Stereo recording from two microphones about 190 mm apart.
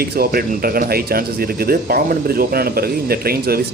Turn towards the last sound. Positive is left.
turn(degrees=-55)  # may be behind; listen again after turning